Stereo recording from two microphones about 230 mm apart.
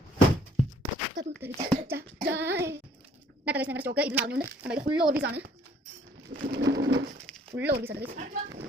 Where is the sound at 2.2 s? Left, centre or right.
Right.